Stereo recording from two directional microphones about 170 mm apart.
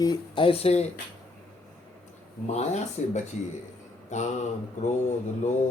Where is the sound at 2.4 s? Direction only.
45° left (ahead or behind).